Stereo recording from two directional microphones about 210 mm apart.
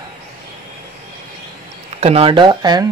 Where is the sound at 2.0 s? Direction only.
25° right (ahead or behind).